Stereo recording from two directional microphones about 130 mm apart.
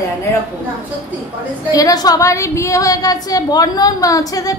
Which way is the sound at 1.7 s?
30° left (ahead or behind).